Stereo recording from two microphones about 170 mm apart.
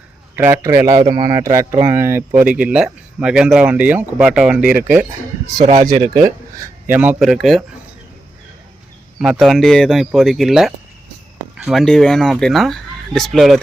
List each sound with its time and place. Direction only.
0.3 s speech: 15° right (ahead or behind)
6.6 s speech: 10° right (ahead or behind)
9.1 s speech: centre (ahead or behind)